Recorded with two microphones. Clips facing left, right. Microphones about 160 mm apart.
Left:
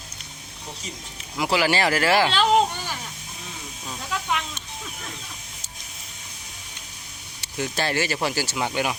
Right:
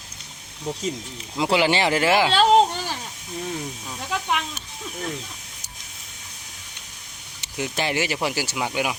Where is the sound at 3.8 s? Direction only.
10° right (ahead or behind).